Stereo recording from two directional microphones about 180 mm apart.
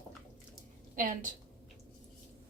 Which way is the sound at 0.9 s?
50° right (ahead or behind).